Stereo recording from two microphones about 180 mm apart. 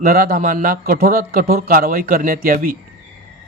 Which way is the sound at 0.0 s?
55° right (ahead or behind).